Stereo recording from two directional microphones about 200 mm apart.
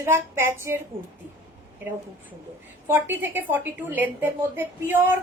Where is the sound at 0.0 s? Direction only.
10° right (ahead or behind).